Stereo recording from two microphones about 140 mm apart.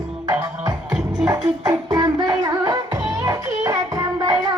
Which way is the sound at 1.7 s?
30° right (ahead or behind).